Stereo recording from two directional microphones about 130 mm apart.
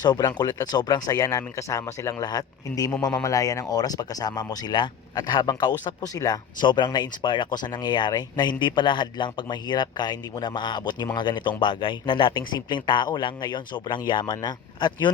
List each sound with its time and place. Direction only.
0.0 s speech: 30° left (ahead or behind)